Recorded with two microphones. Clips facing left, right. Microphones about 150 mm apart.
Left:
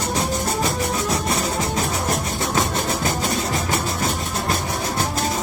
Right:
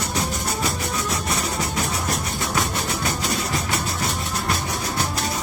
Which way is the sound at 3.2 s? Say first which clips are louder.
Left 3 dB; 45° left (ahead or behind).